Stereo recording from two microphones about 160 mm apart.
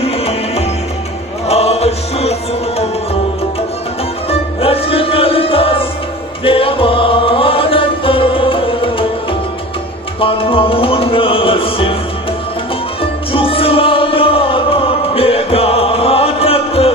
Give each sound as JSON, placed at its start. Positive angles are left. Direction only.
{"t": 0.0, "sound": "music", "side_deg": 40}
{"t": 4.3, "sound": "music", "side_deg": 35}
{"t": 10.2, "sound": "music", "side_deg": 35}
{"t": 13.0, "sound": "music", "side_deg": 35}